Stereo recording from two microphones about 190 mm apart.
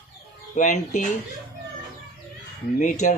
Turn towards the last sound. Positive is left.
turn(degrees=40)  # may be behind; listen again after turning